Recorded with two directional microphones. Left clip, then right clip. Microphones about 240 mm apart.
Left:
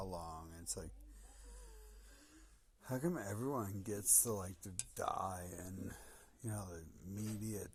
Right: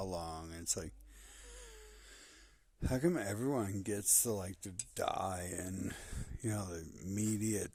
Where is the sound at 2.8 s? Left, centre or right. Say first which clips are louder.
Right 7 dB; right.